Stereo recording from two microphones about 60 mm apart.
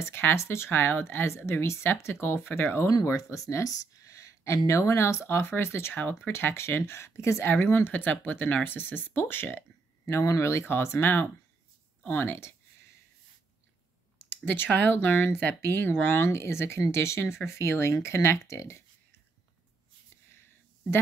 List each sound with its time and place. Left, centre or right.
0.0 s speech: left
2.9 s speech: left
5.9 s speech: left
6.3 s speech: left
10.0 s speech: left
14.1 s a sound: left
14.9 s speech: left